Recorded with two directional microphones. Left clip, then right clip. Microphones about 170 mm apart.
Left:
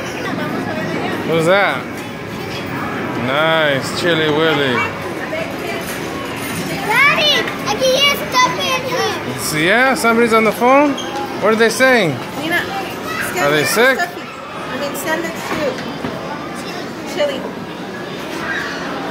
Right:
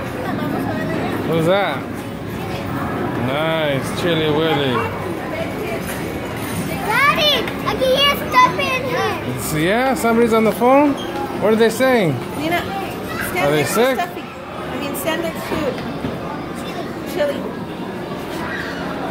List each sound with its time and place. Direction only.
1.3 s speech: centre (ahead or behind)
3.3 s speech: 5° left (ahead or behind)
6.9 s children playing: 65° right (ahead or behind)
7.6 s a child's voice: 15° right (ahead or behind)
13.5 s a child's voice: 10° right (ahead or behind)